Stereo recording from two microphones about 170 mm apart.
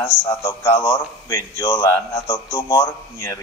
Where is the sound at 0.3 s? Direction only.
15° left (ahead or behind).